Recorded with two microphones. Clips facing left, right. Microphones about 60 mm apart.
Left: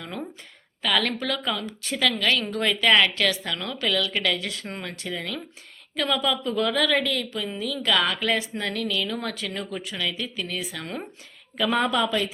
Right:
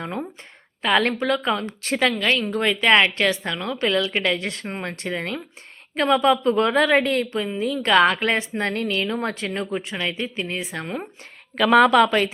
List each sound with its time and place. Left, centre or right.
0.8 s speech: right
1.5 s speech: right
2.0 s a woman's voice: right
11.5 s a woman's voice: right